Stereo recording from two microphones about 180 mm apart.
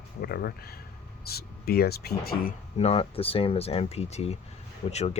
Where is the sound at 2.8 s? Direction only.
35° left (ahead or behind).